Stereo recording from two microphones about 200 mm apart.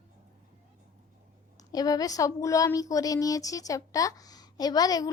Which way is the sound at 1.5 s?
20° left (ahead or behind).